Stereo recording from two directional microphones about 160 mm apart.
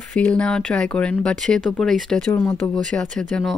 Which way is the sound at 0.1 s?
5° left (ahead or behind).